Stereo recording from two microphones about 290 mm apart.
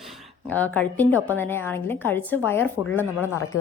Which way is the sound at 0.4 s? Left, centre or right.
Centre.